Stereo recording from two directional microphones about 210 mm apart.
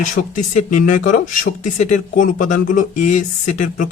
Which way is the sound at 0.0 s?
40° left (ahead or behind).